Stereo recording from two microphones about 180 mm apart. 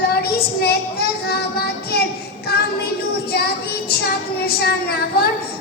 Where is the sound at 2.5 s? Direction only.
60° left (ahead or behind).